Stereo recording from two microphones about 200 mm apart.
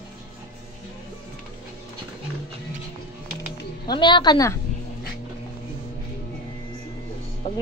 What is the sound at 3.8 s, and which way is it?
Speech, 20° left (ahead or behind).